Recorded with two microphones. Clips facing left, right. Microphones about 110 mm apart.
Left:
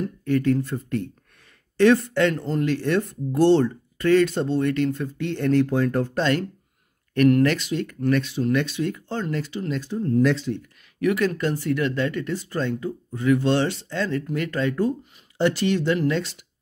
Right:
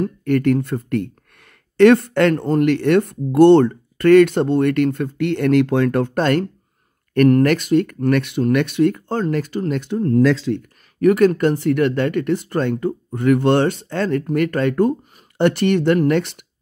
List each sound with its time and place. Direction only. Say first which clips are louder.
0.0 s speech: right 5 dB; 60° right (ahead or behind)
6.1 s speech: right 5 dB; 50° right (ahead or behind); by 10.6 s 90° right
11.0 s speech: right 8 dB; 45° right (ahead or behind); by 16.4 s 60° right (ahead or behind)